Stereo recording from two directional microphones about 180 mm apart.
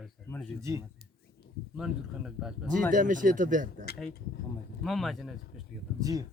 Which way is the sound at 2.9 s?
45° right (ahead or behind).